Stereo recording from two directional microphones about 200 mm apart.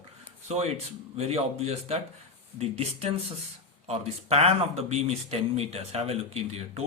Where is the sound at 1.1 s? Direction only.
30° right (ahead or behind).